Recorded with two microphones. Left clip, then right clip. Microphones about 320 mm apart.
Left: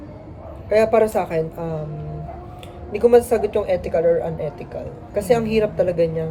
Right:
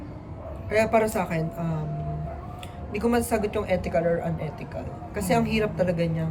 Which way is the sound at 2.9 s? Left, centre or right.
Centre.